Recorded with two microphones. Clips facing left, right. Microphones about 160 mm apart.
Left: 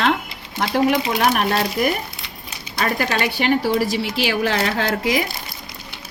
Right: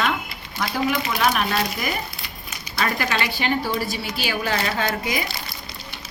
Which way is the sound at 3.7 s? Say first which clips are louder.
Left 6 dB; 90° left.